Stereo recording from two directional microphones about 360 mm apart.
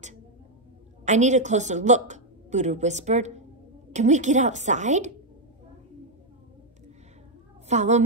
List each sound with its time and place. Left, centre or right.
1.0 s a woman's voice: centre
7.6 s a woman's voice: centre